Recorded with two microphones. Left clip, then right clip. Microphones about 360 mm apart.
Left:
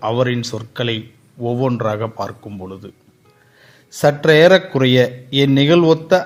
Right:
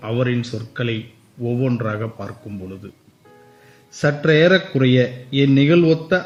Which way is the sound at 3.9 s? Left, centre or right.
Centre.